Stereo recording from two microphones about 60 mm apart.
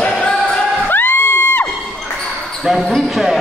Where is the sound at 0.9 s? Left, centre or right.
Left.